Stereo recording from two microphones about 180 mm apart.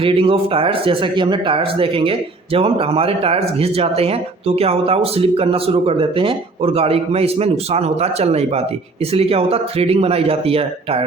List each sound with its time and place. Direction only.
0.0 s speech: 30° right (ahead or behind)